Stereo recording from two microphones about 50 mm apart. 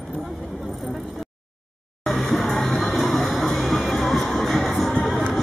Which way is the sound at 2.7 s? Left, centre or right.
Centre.